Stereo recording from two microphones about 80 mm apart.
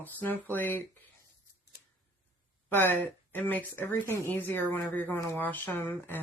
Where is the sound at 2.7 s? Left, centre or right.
Left.